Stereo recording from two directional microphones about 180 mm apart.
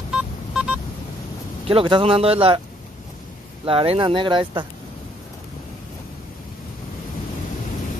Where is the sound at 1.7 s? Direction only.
30° right (ahead or behind).